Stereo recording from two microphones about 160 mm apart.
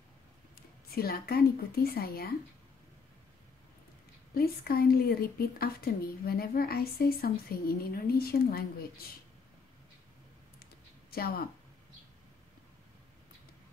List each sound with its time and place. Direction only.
0.6 s a woman's voice: 70° left (ahead or behind)
4.3 s speech: 70° left (ahead or behind)
11.1 s speech: 70° left (ahead or behind)